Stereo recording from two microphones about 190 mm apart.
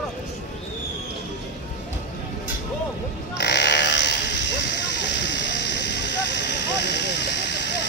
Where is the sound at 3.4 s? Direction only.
60° left (ahead or behind).